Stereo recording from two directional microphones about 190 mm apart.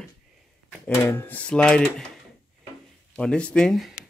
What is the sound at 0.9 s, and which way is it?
Speech, 15° left (ahead or behind).